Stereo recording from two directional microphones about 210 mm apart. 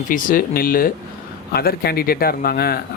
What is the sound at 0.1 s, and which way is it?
Speech, 40° left (ahead or behind).